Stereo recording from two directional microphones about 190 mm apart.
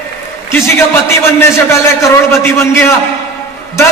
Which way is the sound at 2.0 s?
15° left (ahead or behind).